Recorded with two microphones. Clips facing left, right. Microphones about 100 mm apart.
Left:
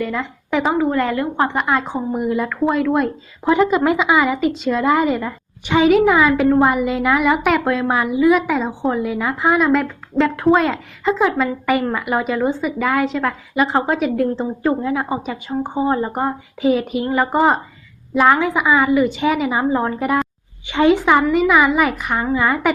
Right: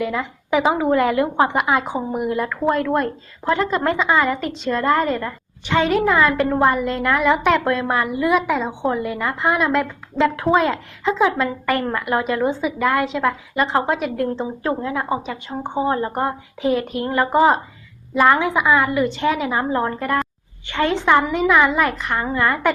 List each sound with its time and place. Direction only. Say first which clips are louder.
0.0 s a woman's voice: even; 5° right (ahead or behind)
0.8 s a woman's voice: right 1 dB; 15° right (ahead or behind); by 21.0 s 15° left (ahead or behind)
21.0 s speech: left 2 dB; 5° left (ahead or behind)